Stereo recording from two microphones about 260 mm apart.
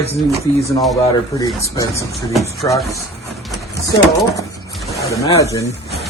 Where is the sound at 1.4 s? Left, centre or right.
Centre.